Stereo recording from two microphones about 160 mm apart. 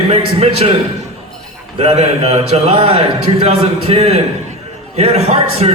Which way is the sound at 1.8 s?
40° right (ahead or behind).